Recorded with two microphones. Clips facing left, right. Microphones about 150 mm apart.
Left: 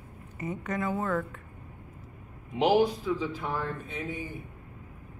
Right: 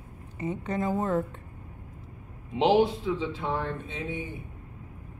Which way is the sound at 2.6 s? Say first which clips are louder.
Right 1 dB; 25° right (ahead or behind).